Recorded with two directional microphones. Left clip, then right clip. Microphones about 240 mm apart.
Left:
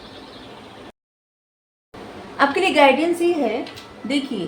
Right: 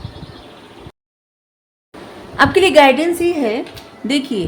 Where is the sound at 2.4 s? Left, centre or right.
Right.